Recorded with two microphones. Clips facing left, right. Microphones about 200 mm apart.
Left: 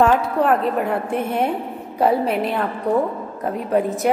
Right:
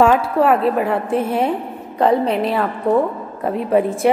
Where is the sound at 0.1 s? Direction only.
Centre (ahead or behind).